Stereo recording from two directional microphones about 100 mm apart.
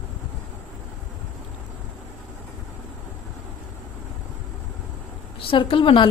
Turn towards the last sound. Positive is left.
turn(degrees=55)  # may be behind; listen again after turning